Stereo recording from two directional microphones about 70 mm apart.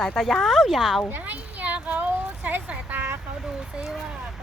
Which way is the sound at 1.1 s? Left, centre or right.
Right.